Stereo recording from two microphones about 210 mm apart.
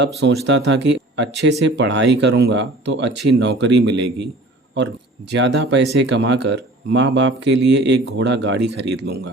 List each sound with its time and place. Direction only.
0.0 s speech: 55° right (ahead or behind)
5.3 s speech: 55° right (ahead or behind)